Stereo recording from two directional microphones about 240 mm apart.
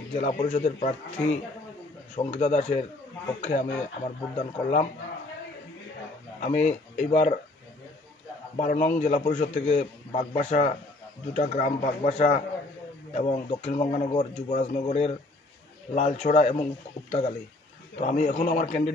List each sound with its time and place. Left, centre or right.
0.1 s a man's voice: left
6.4 s a man's voice: left
8.5 s a man's voice: left